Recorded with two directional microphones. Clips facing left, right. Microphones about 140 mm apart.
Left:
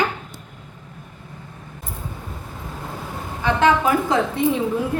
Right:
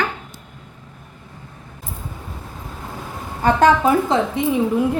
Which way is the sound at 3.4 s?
40° right (ahead or behind).